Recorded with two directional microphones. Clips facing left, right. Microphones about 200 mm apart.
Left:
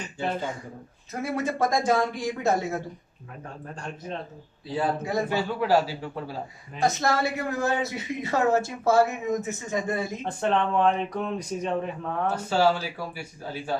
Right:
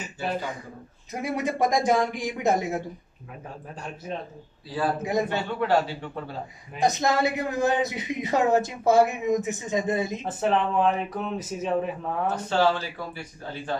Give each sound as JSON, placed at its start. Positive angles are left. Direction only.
{"t": 1.2, "sound": "speech", "side_deg": -15}
{"t": 4.6, "sound": "a man's voice", "side_deg": 20}
{"t": 5.3, "sound": "speech", "side_deg": 5}
{"t": 6.8, "sound": "speech", "side_deg": -20}
{"t": 10.2, "sound": "speech", "side_deg": -5}
{"t": 12.4, "sound": "speech", "side_deg": 10}